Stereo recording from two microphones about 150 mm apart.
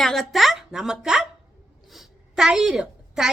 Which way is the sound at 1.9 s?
Centre (ahead or behind).